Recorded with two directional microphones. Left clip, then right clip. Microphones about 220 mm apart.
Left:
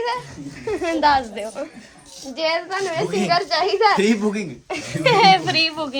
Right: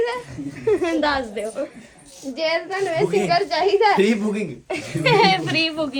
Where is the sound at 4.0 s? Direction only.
5° right (ahead or behind).